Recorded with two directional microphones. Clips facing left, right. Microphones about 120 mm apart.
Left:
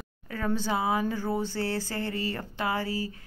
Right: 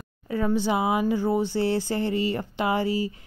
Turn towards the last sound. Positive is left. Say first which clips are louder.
# right 5 dB
turn(degrees=-20)  # may be behind; listen again after turning